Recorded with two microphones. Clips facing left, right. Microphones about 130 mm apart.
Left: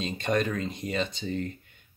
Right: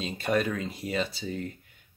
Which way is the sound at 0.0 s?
5° right (ahead or behind).